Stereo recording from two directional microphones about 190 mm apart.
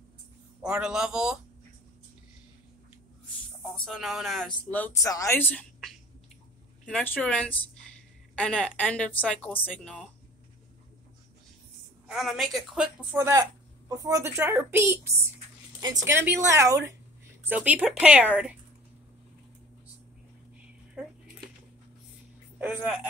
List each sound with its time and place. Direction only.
0.6 s speech: 5° right (ahead or behind)
3.8 s a woman's voice: centre (ahead or behind)
12.1 s speech: centre (ahead or behind)
22.6 s speech: 10° right (ahead or behind)